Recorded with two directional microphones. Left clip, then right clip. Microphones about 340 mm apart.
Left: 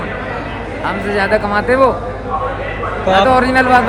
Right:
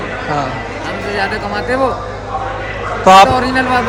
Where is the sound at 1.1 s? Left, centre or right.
Centre.